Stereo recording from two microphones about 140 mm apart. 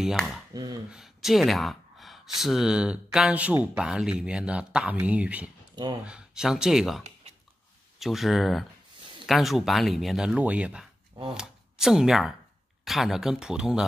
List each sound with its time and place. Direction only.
0.0 s speech: centre (ahead or behind)
0.5 s speech: 25° right (ahead or behind)
0.9 s speech: centre (ahead or behind)
8.0 s speech: centre (ahead or behind)